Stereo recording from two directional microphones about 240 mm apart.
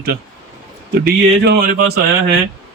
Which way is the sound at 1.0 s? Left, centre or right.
Right.